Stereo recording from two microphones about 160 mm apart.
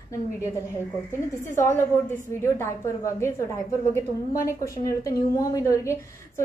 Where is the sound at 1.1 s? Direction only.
15° left (ahead or behind).